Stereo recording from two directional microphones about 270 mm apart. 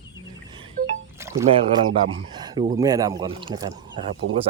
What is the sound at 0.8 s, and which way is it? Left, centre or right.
Music, right.